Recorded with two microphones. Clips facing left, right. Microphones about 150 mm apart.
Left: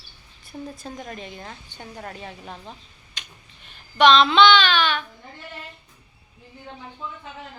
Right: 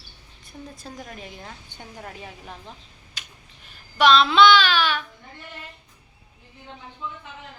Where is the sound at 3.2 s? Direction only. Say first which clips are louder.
Left 1 dB; 5° right (ahead or behind).